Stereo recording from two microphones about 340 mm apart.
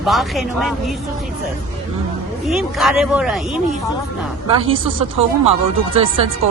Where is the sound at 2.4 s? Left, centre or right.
Centre.